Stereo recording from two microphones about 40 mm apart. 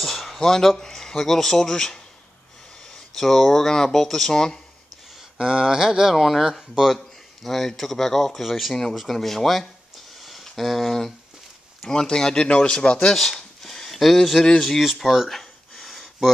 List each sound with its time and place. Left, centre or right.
0.0 s speech: centre
5.4 s a sound: centre
6.1 s speech: centre
7.4 s speech: centre
11.8 s speech: centre
13.1 s speech: centre
13.6 s a sound: centre
14.6 s speech: centre
15.2 s a sound: centre